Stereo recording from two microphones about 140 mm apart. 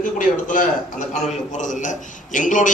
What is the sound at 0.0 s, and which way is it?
A man's voice, 70° left (ahead or behind).